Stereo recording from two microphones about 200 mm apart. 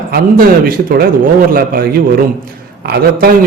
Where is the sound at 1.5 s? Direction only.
45° right (ahead or behind).